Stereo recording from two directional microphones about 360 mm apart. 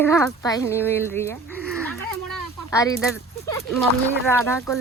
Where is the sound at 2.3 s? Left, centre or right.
Centre.